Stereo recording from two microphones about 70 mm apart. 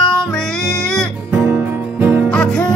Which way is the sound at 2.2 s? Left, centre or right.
Centre.